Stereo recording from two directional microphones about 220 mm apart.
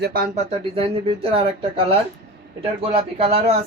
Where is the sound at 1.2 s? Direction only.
25° right (ahead or behind).